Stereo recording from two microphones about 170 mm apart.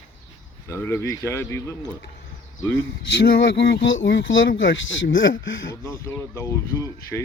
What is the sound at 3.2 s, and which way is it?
Speech, 70° left (ahead or behind).